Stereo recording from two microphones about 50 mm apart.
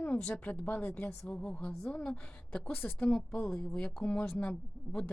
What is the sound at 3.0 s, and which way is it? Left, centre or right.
Speech, centre.